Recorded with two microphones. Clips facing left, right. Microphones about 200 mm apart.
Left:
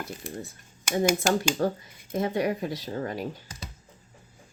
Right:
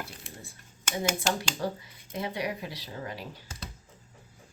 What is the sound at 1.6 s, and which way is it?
Speech, 50° left (ahead or behind).